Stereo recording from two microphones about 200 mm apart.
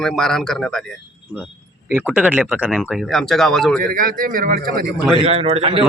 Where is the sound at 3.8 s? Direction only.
45° right (ahead or behind).